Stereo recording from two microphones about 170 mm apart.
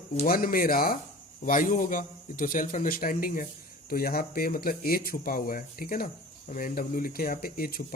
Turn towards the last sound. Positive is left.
turn(degrees=60)  # may be behind; listen again after turning